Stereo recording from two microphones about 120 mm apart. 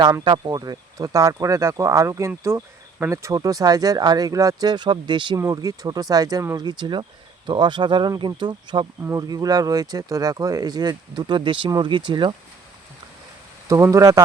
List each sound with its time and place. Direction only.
0.0 s speech: 35° right (ahead or behind)
5.4 s speech: 30° right (ahead or behind)
6.7 s speech: 40° right (ahead or behind)
9.0 s speech: 30° right (ahead or behind)
13.7 s speech: 25° right (ahead or behind)